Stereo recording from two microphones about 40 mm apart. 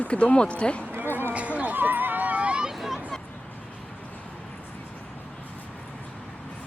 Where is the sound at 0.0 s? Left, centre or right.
Left.